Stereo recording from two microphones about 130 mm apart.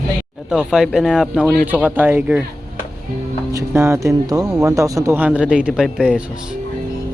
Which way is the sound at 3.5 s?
20° right (ahead or behind).